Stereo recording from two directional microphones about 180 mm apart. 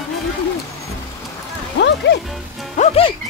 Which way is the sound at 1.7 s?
75° left (ahead or behind).